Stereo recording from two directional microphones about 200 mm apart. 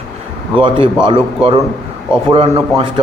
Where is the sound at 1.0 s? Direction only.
25° right (ahead or behind).